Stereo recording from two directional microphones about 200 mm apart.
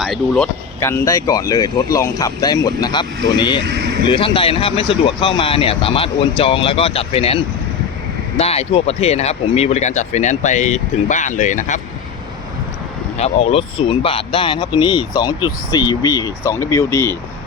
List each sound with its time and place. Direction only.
0.0 s speech: centre (ahead or behind); by 11.8 s 40° left (ahead or behind)
13.1 s speech: 30° left (ahead or behind); by 17.2 s 15° left (ahead or behind)